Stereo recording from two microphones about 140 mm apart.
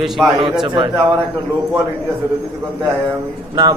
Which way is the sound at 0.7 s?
35° right (ahead or behind).